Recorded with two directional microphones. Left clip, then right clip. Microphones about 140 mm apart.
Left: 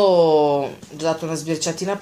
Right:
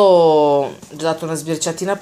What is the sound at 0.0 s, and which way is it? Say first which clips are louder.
Speech: right 4 dB; 40° right (ahead or behind).